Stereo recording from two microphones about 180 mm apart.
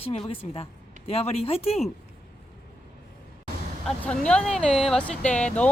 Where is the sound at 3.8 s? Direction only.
5° left (ahead or behind).